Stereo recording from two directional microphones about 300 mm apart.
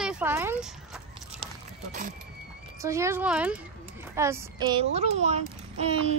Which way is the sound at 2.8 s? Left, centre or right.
Centre.